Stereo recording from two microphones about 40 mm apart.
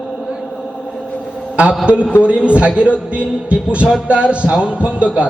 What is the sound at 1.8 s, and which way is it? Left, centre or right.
A man's voice, right.